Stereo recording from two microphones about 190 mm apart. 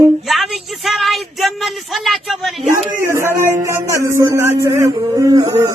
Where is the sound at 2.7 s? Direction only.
15° right (ahead or behind).